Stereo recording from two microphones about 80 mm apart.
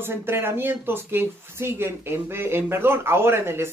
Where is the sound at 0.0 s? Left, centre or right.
Right.